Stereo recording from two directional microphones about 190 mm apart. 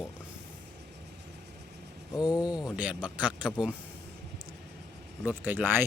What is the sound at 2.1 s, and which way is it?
Speech, 20° left (ahead or behind).